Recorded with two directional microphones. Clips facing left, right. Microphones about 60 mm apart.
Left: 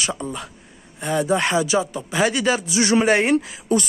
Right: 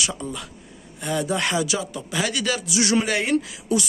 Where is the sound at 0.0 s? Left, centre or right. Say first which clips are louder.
Left 2 dB; left.